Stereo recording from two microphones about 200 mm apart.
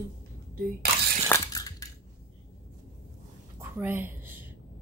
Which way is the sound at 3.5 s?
10° right (ahead or behind).